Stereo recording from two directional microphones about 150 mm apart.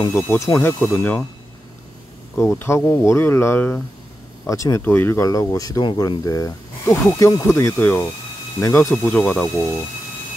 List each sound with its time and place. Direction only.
0.1 s speech: 15° left (ahead or behind)
2.3 s speech: 15° left (ahead or behind)